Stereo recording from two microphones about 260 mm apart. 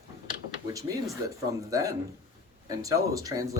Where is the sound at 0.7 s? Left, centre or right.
Centre.